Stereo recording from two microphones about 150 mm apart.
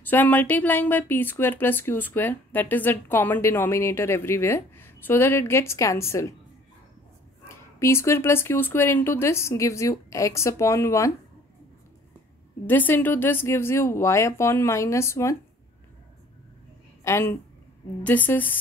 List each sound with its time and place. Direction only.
0.0 s speech: 10° left (ahead or behind)
7.4 s speech: 15° left (ahead or behind)
12.6 s speech: 10° left (ahead or behind)
17.0 s speech: 15° left (ahead or behind)